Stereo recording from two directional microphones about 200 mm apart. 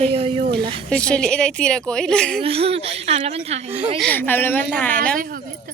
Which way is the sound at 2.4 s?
30° right (ahead or behind).